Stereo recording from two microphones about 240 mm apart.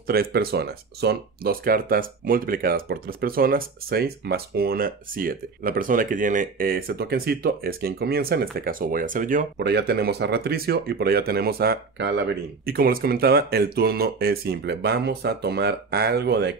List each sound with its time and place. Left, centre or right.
0.0 s speech: right